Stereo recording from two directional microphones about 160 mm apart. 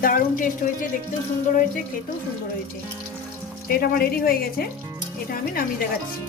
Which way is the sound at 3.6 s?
65° left (ahead or behind).